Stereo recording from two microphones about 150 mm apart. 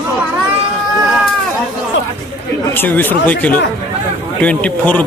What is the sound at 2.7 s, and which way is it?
A man's voice, 15° left (ahead or behind).